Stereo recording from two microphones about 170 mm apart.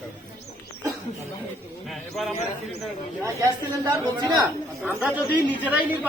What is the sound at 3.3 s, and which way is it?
Speech, 20° right (ahead or behind).